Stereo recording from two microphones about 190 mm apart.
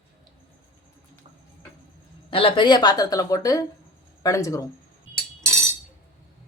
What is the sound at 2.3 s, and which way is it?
A woman's voice, 30° left (ahead or behind).